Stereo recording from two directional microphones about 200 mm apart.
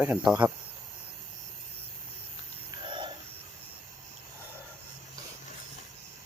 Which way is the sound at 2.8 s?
25° right (ahead or behind).